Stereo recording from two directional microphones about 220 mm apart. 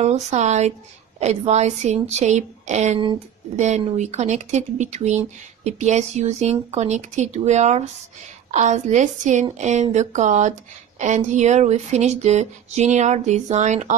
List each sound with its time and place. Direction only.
0.0 s a woman's voice: 30° right (ahead or behind)